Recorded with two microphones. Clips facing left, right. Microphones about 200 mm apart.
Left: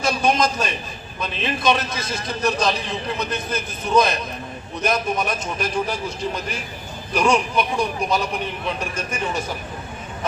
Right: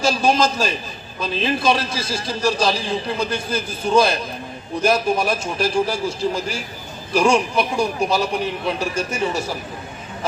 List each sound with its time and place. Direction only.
0.0 s a man's voice: 30° right (ahead or behind)